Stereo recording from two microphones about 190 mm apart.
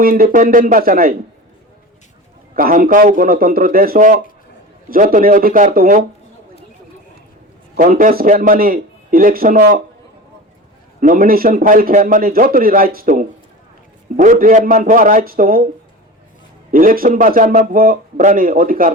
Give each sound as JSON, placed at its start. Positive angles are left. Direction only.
{"t": 0.0, "sound": "a man's voice", "side_deg": -50}
{"t": 2.6, "sound": "a man's voice", "side_deg": -50}
{"t": 7.8, "sound": "a man's voice", "side_deg": -45}
{"t": 11.0, "sound": "a man's voice", "side_deg": -50}
{"t": 16.7, "sound": "a man's voice", "side_deg": -50}